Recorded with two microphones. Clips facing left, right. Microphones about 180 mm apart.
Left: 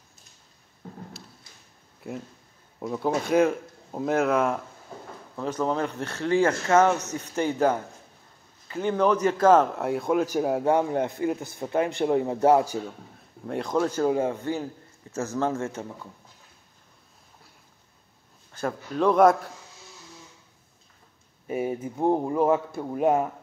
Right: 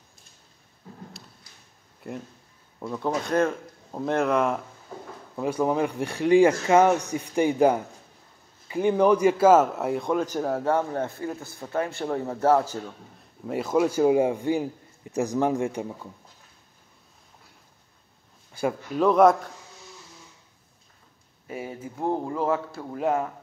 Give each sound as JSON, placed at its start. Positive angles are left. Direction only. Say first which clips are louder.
{"t": 2.0, "sound": "a man's voice", "louder": "even", "side_deg": 0}
{"t": 5.3, "sound": "a man's voice", "louder": "right 2 dB", "side_deg": -10}
{"t": 13.5, "sound": "a man's voice", "louder": "right 2 dB", "side_deg": -5}
{"t": 18.5, "sound": "speech", "louder": "right 3 dB", "side_deg": -10}
{"t": 21.5, "sound": "a man's voice", "louder": "left 7 dB", "side_deg": 20}